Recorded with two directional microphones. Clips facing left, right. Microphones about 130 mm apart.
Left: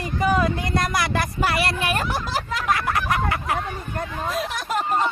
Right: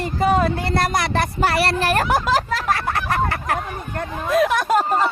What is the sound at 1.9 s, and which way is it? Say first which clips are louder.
Speech: right 7 dB; 85° right.